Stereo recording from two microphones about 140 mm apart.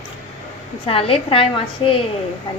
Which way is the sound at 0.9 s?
40° left (ahead or behind).